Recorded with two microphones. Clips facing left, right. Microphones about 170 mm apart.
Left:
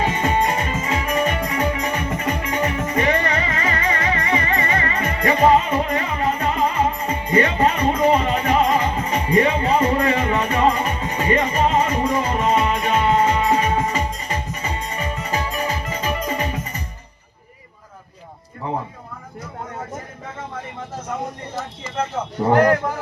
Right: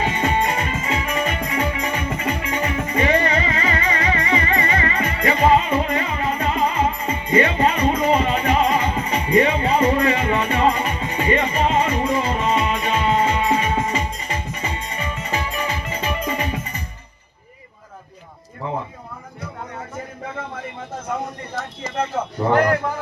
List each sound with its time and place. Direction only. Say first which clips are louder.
0.0 s music: left 1 dB; 40° left (ahead or behind)